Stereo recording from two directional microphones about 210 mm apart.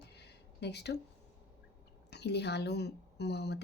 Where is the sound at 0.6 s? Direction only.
55° left (ahead or behind).